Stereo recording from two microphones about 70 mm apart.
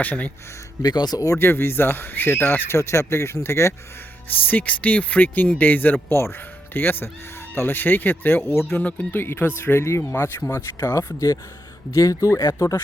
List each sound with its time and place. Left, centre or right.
0.0 s speech: left
0.8 s speech: left
1.4 s speech: left
4.3 s speech: left
8.8 s speech: left
9.2 s speech: left
10.9 s speech: left